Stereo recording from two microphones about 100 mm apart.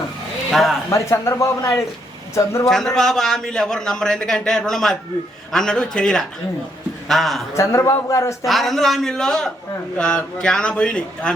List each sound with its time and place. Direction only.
0.5 s a man's voice: centre (ahead or behind)
0.9 s a man's voice: 30° left (ahead or behind)
2.6 s a man's voice: 5° left (ahead or behind)
7.5 s a man's voice: 30° left (ahead or behind)
8.4 s a man's voice: centre (ahead or behind)